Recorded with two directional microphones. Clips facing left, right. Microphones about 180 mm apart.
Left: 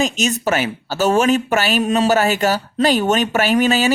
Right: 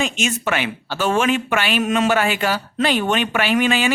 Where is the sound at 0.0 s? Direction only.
40° left (ahead or behind).